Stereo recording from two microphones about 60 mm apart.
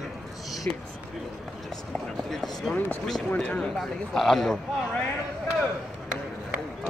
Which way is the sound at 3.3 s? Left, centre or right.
Centre.